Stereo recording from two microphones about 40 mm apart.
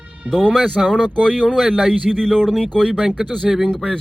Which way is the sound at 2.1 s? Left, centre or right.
Centre.